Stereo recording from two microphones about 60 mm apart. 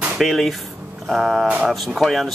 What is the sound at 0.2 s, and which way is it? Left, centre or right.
Speech, centre.